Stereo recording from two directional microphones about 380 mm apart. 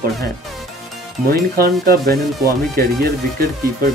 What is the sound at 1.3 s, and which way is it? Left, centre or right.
Speech, right.